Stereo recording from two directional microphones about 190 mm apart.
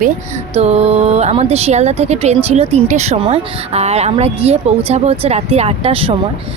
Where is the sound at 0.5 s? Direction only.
35° right (ahead or behind).